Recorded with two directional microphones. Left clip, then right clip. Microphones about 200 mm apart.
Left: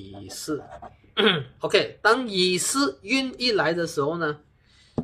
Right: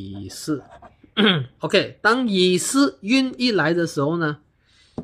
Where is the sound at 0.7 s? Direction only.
10° left (ahead or behind).